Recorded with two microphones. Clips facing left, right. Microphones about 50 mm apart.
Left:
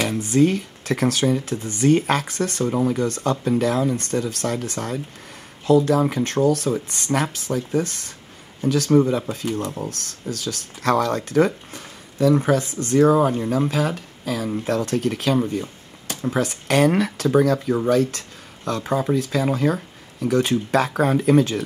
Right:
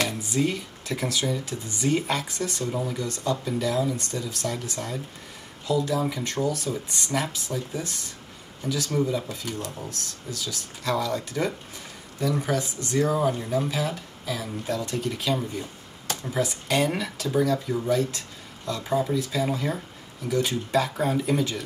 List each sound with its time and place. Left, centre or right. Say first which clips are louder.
0.2 s speech: left 8 dB; left